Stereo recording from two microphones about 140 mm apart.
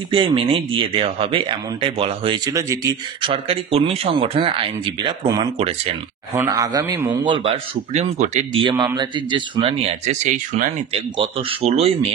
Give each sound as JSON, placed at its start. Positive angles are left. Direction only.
{"t": 0.1, "sound": "speech", "side_deg": -35}
{"t": 3.2, "sound": "a man's voice", "side_deg": -40}
{"t": 6.3, "sound": "speech", "side_deg": -25}
{"t": 7.2, "sound": "speech", "side_deg": -35}
{"t": 7.9, "sound": "a man's voice", "side_deg": -50}
{"t": 8.6, "sound": "a man's voice", "side_deg": -30}